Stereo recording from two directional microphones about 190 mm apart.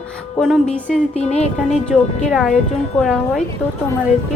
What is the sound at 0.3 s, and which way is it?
Speech, centre (ahead or behind).